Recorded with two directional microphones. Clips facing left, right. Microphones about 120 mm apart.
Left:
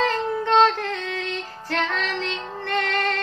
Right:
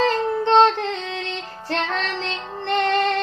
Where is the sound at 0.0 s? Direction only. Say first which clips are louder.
Right 3 dB; 25° right (ahead or behind).